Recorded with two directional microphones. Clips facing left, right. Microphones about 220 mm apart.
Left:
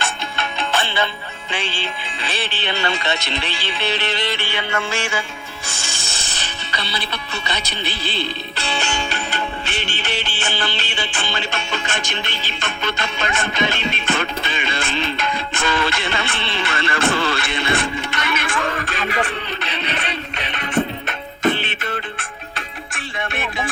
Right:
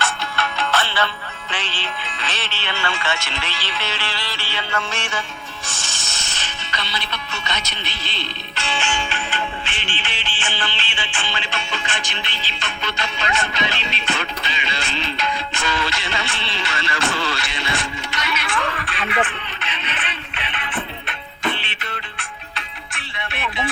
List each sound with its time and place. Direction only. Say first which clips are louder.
0.0 s music: right 1 dB; 15° left (ahead or behind)
4.8 s music: left 4 dB; 30° left (ahead or behind)
6.1 s music: left 2 dB; 35° left (ahead or behind)